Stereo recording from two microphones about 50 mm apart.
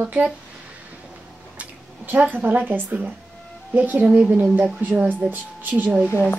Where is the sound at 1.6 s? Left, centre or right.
Right.